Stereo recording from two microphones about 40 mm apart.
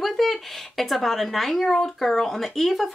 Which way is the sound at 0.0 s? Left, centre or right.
Centre.